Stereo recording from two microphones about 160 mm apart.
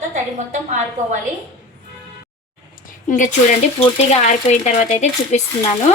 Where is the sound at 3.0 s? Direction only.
50° left (ahead or behind).